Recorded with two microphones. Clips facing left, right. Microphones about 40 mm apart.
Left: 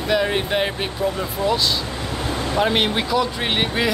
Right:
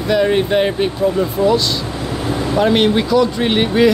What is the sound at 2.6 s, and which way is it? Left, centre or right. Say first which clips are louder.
Speech: right 6 dB; centre.